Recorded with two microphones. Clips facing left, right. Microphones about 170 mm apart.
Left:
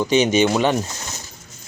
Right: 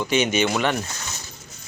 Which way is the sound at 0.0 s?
40° left (ahead or behind).